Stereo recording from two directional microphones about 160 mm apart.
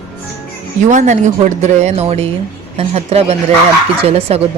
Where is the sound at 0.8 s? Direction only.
50° right (ahead or behind).